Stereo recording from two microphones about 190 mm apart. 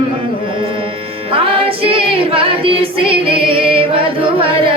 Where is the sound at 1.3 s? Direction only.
30° right (ahead or behind).